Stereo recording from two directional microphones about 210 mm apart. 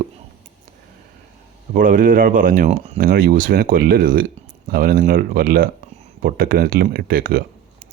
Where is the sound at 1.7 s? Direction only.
40° right (ahead or behind).